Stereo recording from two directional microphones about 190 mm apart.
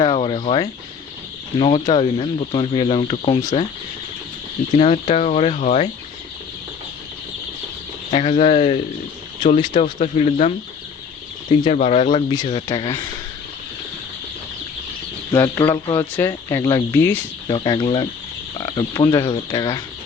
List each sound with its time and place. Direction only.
0.0 s speech: 25° left (ahead or behind)
4.7 s speech: 35° left (ahead or behind)
8.1 s speech: 30° left (ahead or behind)
11.5 s speech: 30° left (ahead or behind)
15.3 s speech: 15° left (ahead or behind)